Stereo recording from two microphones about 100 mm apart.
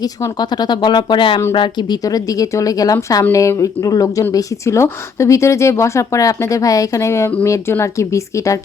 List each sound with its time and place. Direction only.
0.0 s speech: 45° left (ahead or behind)
2.0 s speech: 35° left (ahead or behind)